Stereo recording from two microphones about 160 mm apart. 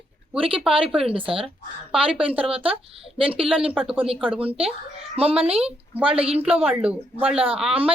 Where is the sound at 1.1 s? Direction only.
35° right (ahead or behind).